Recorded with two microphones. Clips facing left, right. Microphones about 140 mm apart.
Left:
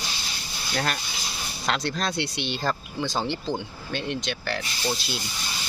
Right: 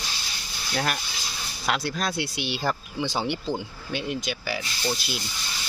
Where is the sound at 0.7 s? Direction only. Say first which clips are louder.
Even; 5° right (ahead or behind).